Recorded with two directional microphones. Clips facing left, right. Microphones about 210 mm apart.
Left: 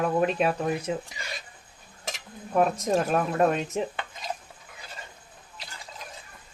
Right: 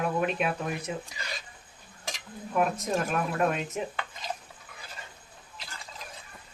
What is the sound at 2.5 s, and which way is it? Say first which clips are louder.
Speech: left 4 dB; 35° left (ahead or behind).